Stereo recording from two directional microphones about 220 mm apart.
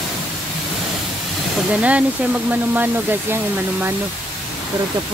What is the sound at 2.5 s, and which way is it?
Speech, 10° right (ahead or behind).